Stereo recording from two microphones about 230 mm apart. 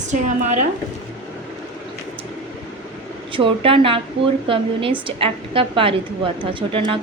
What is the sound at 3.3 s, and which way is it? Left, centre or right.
A woman's voice, right.